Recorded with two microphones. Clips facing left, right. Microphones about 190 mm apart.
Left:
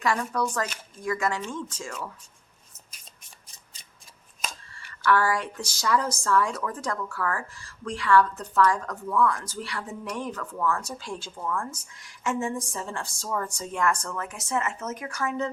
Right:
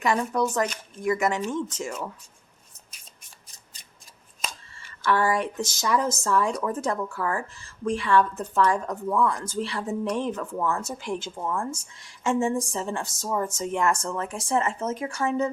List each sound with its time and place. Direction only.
0.0 s speech: 20° right (ahead or behind)
4.7 s speech: 20° right (ahead or behind)